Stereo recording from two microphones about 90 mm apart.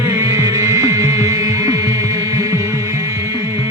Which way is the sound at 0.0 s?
35° right (ahead or behind).